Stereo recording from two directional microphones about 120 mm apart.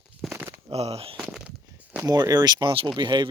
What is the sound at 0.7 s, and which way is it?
Speech, 55° right (ahead or behind).